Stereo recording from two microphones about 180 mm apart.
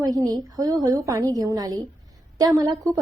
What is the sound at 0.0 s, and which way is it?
A woman's voice, 20° right (ahead or behind).